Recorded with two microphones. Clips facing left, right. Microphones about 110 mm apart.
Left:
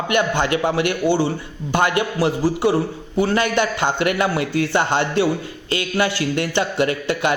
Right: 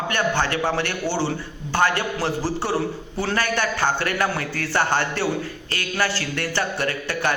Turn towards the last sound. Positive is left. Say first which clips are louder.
# left 4 dB
turn(degrees=20)  # may be behind; listen again after turning